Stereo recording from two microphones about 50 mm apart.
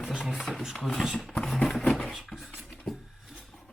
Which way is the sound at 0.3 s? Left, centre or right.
Centre.